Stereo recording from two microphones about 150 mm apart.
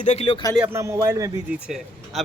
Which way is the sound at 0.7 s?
20° right (ahead or behind).